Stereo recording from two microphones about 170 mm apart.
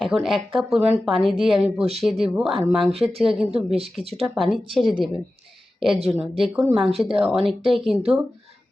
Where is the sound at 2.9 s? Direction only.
35° right (ahead or behind).